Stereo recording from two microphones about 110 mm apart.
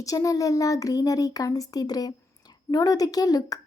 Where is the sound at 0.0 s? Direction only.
30° left (ahead or behind).